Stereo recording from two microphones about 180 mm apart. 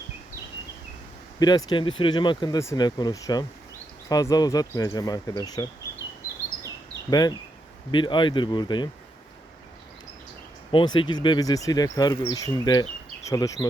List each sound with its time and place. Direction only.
1.4 s speech: 25° left (ahead or behind)
7.1 s speech: 20° left (ahead or behind)
10.7 s speech: 25° left (ahead or behind)